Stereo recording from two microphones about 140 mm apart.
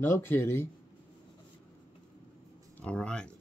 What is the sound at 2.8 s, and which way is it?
Speech, 5° left (ahead or behind).